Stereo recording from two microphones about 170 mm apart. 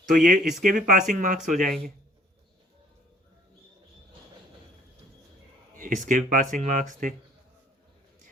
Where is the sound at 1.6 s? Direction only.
Centre (ahead or behind).